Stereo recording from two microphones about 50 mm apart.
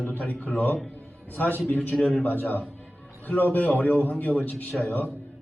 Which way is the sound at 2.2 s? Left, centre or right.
Left.